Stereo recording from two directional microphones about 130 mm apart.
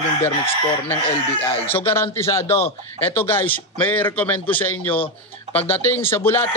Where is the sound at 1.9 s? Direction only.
20° left (ahead or behind).